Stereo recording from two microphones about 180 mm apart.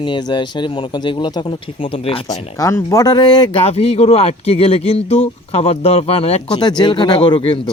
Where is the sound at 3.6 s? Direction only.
35° left (ahead or behind).